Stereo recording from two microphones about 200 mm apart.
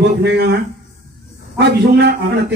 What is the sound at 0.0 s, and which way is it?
Speech, 55° right (ahead or behind).